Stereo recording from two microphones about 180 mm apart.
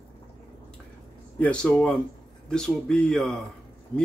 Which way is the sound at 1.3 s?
5° left (ahead or behind).